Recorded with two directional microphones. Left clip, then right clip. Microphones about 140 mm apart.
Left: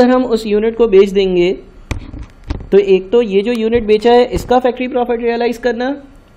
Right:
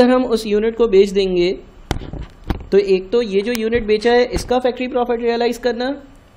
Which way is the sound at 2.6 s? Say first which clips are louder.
Left 4 dB; 30° left (ahead or behind).